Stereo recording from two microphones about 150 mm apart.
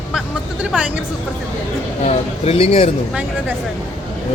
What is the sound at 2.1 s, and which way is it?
Speech, 40° left (ahead or behind).